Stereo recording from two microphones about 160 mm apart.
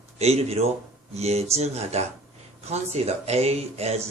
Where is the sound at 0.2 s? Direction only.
40° right (ahead or behind).